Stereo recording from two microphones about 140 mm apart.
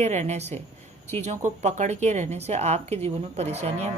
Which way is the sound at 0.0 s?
50° right (ahead or behind).